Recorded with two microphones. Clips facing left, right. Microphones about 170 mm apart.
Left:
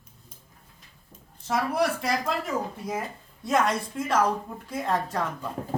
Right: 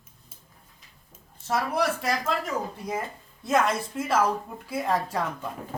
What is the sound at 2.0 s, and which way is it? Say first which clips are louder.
Speech: even; centre (ahead or behind).